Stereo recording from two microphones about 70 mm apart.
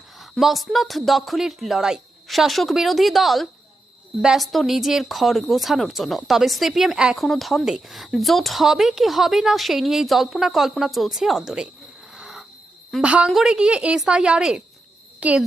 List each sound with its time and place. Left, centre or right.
0.2 s speech: centre
12.1 s cricket: centre
13.0 s a woman's voice: centre